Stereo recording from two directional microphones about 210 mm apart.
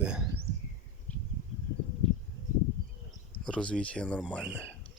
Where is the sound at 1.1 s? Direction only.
10° left (ahead or behind).